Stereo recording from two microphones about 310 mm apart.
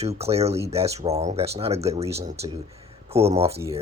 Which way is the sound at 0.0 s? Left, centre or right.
Centre.